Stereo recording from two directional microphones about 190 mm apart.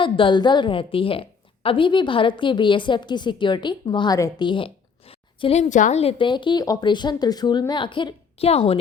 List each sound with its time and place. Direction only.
0.0 s a woman's voice: 25° left (ahead or behind)